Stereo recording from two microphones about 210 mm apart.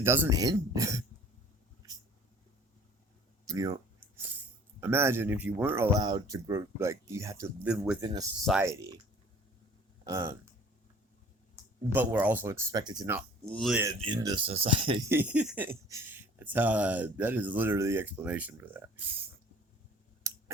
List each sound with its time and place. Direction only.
0.0 s speech: 10° right (ahead or behind)
3.4 s speech: 15° right (ahead or behind)
4.8 s speech: 10° right (ahead or behind)
8.0 s speech: 15° right (ahead or behind)
10.0 s speech: 15° right (ahead or behind)
11.9 s speech: 10° right (ahead or behind)
13.5 s speech: centre (ahead or behind)
14.0 s speech: 20° right (ahead or behind)
15.1 s speech: 5° right (ahead or behind)
20.2 s a sound: 15° right (ahead or behind)